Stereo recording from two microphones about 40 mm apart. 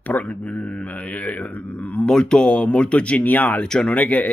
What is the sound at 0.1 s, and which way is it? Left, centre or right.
Speech, left.